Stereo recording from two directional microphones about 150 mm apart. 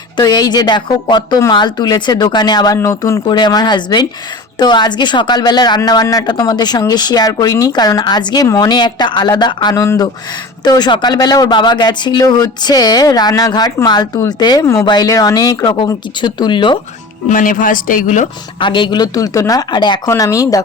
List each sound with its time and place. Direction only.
0.2 s speech: 25° left (ahead or behind)
17.2 s speech: 65° left (ahead or behind)
18.6 s speech: 30° left (ahead or behind)